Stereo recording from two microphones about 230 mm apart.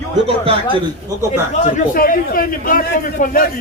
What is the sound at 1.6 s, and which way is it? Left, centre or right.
A man's voice, left.